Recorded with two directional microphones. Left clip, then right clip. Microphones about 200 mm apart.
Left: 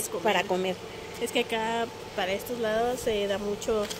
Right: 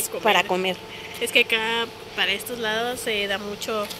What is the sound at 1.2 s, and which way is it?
Speech, 25° left (ahead or behind).